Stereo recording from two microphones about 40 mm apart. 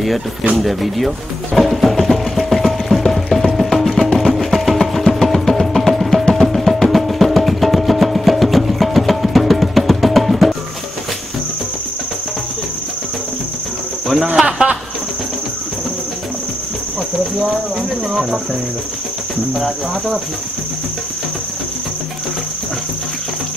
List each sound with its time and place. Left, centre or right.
0.6 s music: centre
14.4 s cricket: right